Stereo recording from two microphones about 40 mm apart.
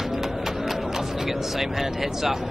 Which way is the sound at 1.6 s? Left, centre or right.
Centre.